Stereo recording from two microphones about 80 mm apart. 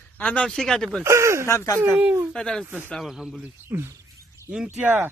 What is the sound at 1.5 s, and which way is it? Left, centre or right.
Speech, left.